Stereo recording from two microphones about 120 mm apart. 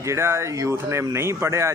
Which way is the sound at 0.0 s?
25° right (ahead or behind).